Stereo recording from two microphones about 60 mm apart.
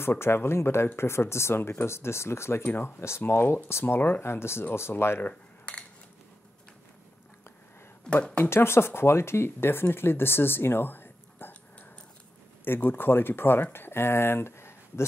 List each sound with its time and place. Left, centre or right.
0.0 s speech: left
2.6 s speech: left
3.0 s speech: left
5.2 s a sound: centre
8.5 s speech: left
12.6 s speech: left